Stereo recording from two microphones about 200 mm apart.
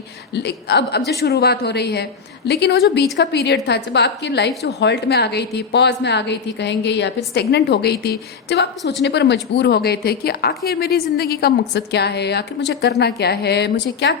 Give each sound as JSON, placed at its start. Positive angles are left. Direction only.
{"t": 0.3, "sound": "a woman's voice", "side_deg": 55}